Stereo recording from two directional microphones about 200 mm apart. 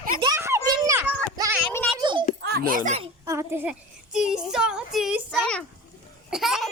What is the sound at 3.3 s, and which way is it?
Speech, 10° right (ahead or behind).